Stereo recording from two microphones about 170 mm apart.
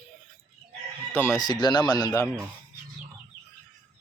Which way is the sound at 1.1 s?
15° left (ahead or behind).